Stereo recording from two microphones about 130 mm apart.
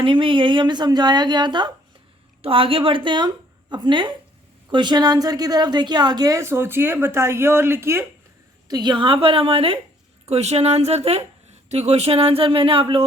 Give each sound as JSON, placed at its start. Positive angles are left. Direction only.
{"t": 0.0, "sound": "a woman's voice", "side_deg": -40}
{"t": 8.6, "sound": "speech", "side_deg": -35}
{"t": 10.2, "sound": "speech", "side_deg": -55}